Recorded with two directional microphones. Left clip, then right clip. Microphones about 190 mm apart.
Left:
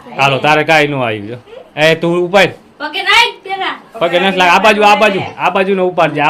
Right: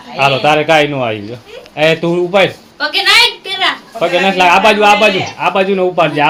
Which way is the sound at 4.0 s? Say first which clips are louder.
Even; centre (ahead or behind).